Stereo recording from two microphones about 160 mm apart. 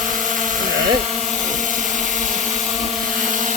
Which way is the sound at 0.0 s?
55° right (ahead or behind).